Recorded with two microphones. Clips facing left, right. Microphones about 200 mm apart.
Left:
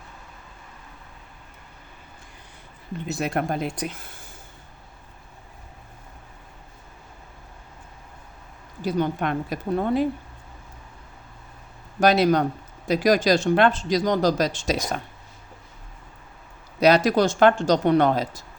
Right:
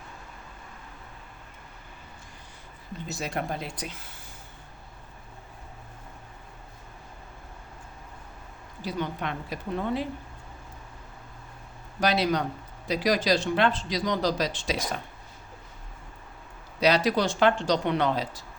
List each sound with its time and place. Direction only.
3.1 s speech: 55° left (ahead or behind)
8.8 s speech: 45° left (ahead or behind)
11.9 s speech: 50° left (ahead or behind)
16.8 s speech: 45° left (ahead or behind)